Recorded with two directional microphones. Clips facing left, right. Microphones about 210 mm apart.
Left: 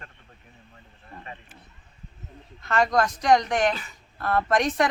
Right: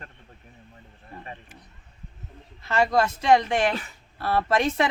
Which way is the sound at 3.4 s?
25° right (ahead or behind).